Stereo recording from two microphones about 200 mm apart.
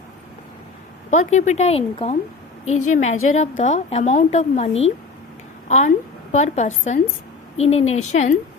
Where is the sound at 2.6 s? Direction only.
90° left.